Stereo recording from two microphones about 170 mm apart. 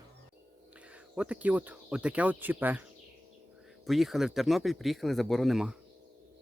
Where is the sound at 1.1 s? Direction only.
5° right (ahead or behind).